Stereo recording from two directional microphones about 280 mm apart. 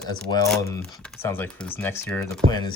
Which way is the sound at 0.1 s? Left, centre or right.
Centre.